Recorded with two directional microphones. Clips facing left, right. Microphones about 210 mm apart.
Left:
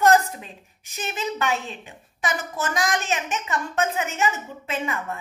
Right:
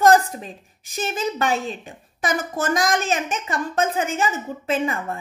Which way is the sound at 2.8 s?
35° right (ahead or behind).